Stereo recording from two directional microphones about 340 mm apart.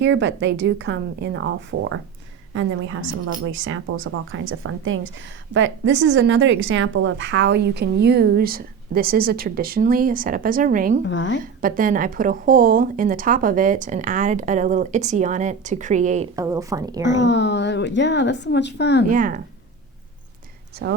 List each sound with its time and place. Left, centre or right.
0.0 s a woman's voice: right
11.0 s a woman's voice: left
11.6 s a woman's voice: right
17.2 s a woman's voice: left
19.0 s a woman's voice: right
20.8 s a woman's voice: right